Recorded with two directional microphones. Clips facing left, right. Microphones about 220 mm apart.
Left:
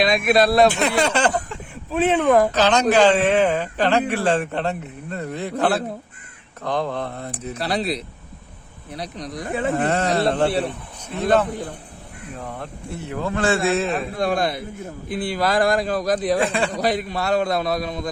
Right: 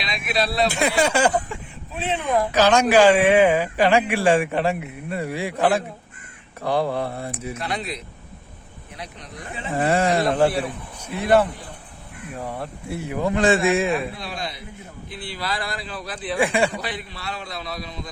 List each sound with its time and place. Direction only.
0.0 s a man's voice: 50° left (ahead or behind)
0.7 s speech: 10° right (ahead or behind)
2.0 s a man's voice: 55° left (ahead or behind)
2.5 s speech: 10° right (ahead or behind)
7.5 s speech: 35° left (ahead or behind)
9.7 s speech: 10° right (ahead or behind)
12.4 s speech: 10° right (ahead or behind)
14.2 s a man's voice: 50° left (ahead or behind)
16.4 s speech: 10° right (ahead or behind)
16.7 s a man's voice: 40° left (ahead or behind)